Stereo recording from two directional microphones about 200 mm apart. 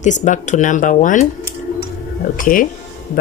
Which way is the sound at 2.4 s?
40° left (ahead or behind).